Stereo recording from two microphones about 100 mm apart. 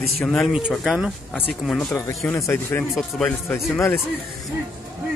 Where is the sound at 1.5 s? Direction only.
5° left (ahead or behind).